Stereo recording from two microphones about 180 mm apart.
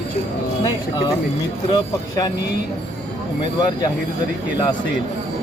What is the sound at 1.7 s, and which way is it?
Speech, 25° left (ahead or behind).